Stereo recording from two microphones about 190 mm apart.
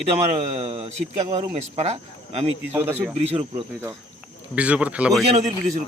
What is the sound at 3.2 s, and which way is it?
Speech, 30° right (ahead or behind).